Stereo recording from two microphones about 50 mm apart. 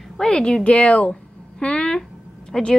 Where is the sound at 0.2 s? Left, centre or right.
Centre.